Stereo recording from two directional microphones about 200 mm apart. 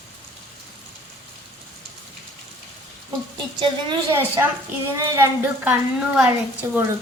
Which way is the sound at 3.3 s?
20° right (ahead or behind).